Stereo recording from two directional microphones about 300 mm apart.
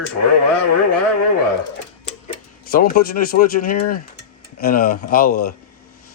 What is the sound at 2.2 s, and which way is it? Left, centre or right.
Speech, left.